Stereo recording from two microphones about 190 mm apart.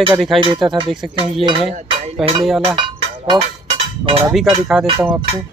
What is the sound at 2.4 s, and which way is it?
Speech, centre (ahead or behind).